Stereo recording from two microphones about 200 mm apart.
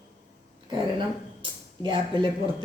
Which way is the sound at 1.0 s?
25° right (ahead or behind).